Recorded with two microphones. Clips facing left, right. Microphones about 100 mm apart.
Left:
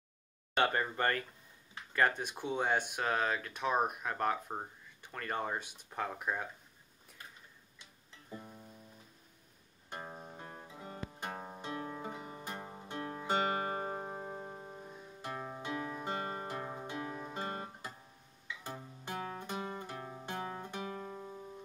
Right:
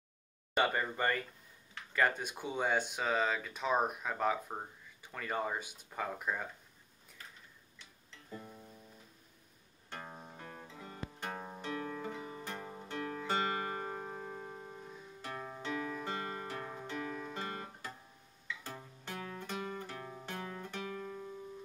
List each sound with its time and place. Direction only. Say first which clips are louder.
0.6 s speech: left 1 dB; centre (ahead or behind)
8.4 s music: right 2 dB; 5° left (ahead or behind)
9.8 s music: left 2 dB; 15° left (ahead or behind)
15.2 s music: left 1 dB; 20° left (ahead or behind)
19.1 s music: left 3 dB; 30° left (ahead or behind)
19.4 s music: even; 20° left (ahead or behind)
20.7 s guitar: even; 25° left (ahead or behind)